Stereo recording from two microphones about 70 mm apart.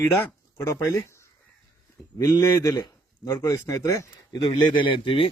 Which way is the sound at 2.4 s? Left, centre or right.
Left.